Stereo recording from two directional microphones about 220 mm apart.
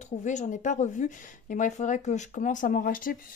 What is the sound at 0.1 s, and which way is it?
Speech, 35° left (ahead or behind).